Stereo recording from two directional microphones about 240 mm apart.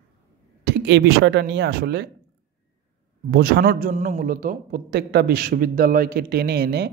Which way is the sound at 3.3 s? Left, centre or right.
Right.